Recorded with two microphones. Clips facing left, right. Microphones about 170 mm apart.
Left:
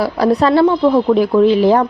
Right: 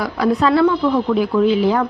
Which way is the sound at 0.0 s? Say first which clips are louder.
Left 3 dB; 35° left (ahead or behind).